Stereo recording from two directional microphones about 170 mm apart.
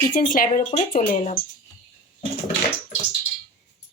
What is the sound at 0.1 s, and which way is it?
Speech, 50° left (ahead or behind).